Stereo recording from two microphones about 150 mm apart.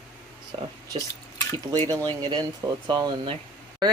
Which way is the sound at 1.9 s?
25° right (ahead or behind).